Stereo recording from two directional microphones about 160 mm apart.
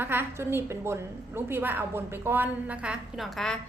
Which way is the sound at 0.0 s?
15° right (ahead or behind).